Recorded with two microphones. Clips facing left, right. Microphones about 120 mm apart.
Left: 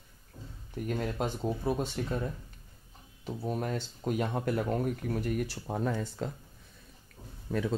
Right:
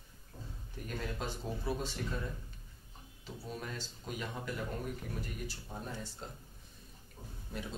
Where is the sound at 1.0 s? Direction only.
50° left (ahead or behind); by 6.3 s 90° left.